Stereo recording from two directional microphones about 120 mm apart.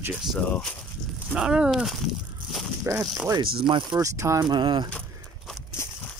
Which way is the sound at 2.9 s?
25° right (ahead or behind).